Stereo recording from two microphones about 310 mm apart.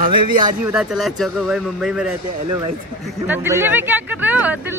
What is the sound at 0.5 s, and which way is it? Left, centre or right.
Speech, centre.